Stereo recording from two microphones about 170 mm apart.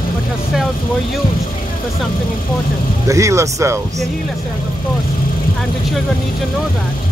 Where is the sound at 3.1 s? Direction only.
20° right (ahead or behind).